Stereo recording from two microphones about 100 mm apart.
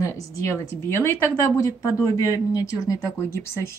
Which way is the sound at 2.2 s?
35° left (ahead or behind).